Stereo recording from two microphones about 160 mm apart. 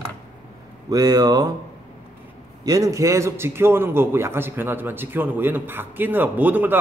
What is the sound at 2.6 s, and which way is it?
A man's voice, 20° right (ahead or behind).